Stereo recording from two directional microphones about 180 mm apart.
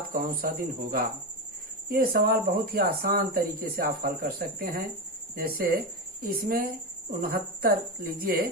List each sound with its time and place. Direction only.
0.1 s speech: 50° right (ahead or behind)